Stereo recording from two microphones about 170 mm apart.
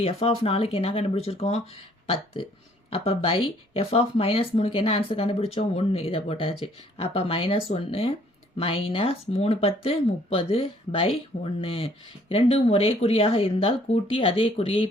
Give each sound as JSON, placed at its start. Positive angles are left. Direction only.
{"t": 0.0, "sound": "speech", "side_deg": 35}